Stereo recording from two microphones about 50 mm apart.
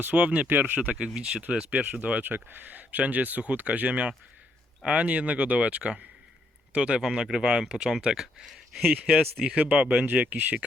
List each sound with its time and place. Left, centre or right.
0.2 s speech: right
0.4 s speech: right
0.9 s speech: centre
2.2 s speech: right; by 8.9 s centre
8.9 s speech: right